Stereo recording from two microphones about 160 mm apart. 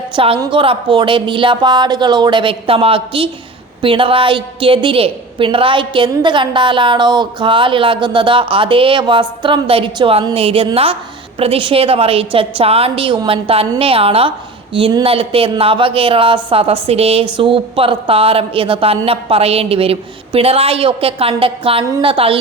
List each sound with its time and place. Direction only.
0.3 s a woman's voice: 35° right (ahead or behind)